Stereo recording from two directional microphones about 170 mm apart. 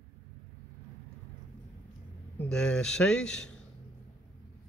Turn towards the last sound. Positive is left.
turn(degrees=5)  # may be behind; listen again after turning